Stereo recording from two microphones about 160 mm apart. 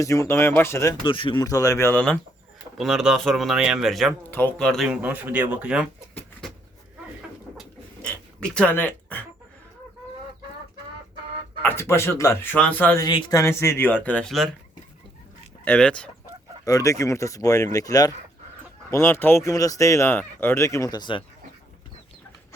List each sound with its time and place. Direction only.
0.0 s speech: 20° left (ahead or behind)
1.0 s speech: 30° left (ahead or behind); by 2.1 s 10° left (ahead or behind)
2.7 s speech: centre (ahead or behind)
4.3 s speech: 10° left (ahead or behind)
4.6 s speech: centre (ahead or behind)
7.5 s rodents: centre (ahead or behind)
11.6 s speech: 15° left (ahead or behind)
13.0 s speech: 30° left (ahead or behind)
13.4 s speech: 15° left (ahead or behind)
15.6 s speech: 5° left (ahead or behind)
16.6 s speech: 20° left (ahead or behind)